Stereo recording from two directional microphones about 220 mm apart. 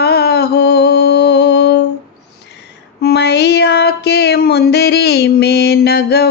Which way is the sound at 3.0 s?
50° left (ahead or behind).